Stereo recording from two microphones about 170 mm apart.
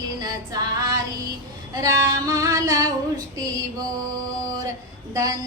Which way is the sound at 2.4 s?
20° right (ahead or behind).